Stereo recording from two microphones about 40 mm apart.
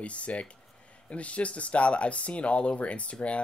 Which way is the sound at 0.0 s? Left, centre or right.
Left.